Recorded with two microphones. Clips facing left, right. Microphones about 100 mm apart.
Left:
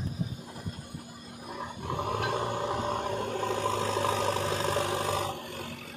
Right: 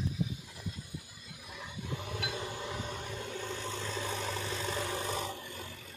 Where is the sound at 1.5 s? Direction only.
50° left (ahead or behind); by 5.7 s 75° left (ahead or behind).